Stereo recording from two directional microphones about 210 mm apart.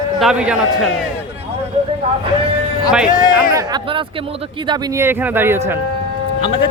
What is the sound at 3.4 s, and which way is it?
A man's voice, 15° right (ahead or behind).